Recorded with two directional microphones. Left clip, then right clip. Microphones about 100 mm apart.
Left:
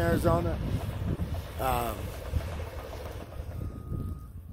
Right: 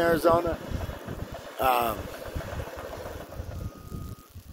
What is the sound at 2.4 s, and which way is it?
Vehicle, 35° left (ahead or behind).